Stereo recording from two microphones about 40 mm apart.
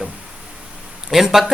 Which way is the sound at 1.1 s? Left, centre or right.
Centre.